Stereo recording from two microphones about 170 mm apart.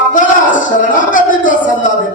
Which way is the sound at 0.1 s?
50° left (ahead or behind).